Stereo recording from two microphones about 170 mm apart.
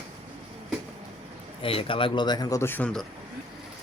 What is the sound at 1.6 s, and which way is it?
Speech, 30° left (ahead or behind).